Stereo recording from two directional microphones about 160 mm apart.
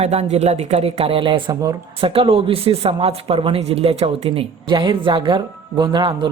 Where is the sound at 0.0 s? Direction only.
40° right (ahead or behind).